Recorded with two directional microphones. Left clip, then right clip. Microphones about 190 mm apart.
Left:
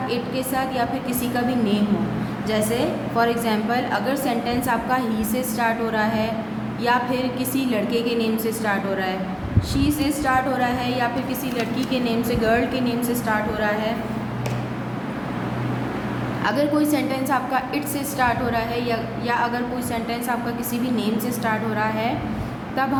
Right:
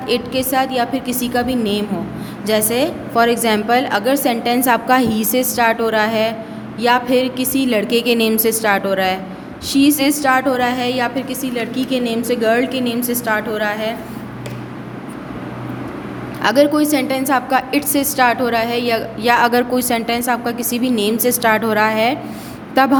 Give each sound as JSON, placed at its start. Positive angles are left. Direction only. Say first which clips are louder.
{"t": 0.1, "sound": "a woman's voice", "louder": "right 7 dB", "side_deg": -50}
{"t": 16.4, "sound": "a woman's voice", "louder": "right 8 dB", "side_deg": -50}